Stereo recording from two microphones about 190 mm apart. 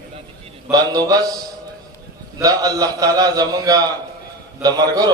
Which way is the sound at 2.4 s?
20° right (ahead or behind).